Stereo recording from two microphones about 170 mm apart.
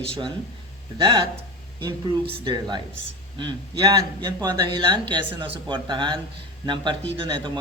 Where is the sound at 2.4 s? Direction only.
25° right (ahead or behind).